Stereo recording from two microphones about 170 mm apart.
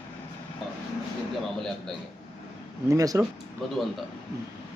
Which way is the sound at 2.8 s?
20° right (ahead or behind).